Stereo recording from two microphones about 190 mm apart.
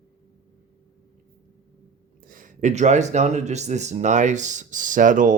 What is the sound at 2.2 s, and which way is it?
Speech, 45° right (ahead or behind).